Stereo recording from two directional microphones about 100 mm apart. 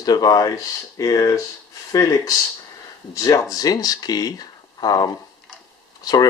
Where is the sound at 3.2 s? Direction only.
35° left (ahead or behind).